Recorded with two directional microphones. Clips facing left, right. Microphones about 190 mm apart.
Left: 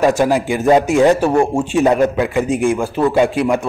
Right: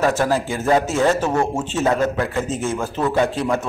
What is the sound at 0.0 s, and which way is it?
A man's voice, 15° left (ahead or behind).